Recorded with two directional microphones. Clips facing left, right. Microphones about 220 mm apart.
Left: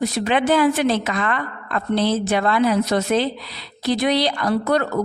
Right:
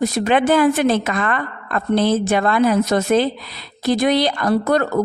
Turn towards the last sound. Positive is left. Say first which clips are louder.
# right 3 dB
turn(degrees=-45)  # may be behind; listen again after turning